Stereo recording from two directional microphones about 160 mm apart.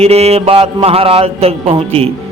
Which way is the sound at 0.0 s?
40° right (ahead or behind).